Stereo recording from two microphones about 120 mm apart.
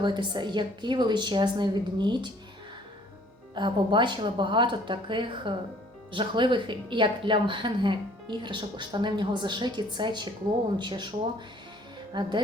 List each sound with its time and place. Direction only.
0.0 s speech: 40° right (ahead or behind)
3.5 s speech: 40° right (ahead or behind)